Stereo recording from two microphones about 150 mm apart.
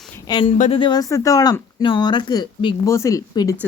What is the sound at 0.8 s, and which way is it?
Speech, 30° left (ahead or behind).